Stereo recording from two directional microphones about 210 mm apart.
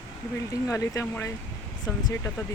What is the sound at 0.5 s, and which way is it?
Speech, 15° left (ahead or behind).